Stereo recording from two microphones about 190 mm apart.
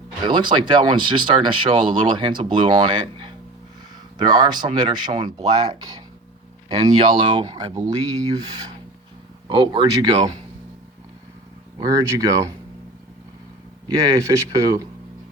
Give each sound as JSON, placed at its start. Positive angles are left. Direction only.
{"t": 0.2, "sound": "speech", "side_deg": -25}
{"t": 11.8, "sound": "speech", "side_deg": -20}
{"t": 13.8, "sound": "speech", "side_deg": -15}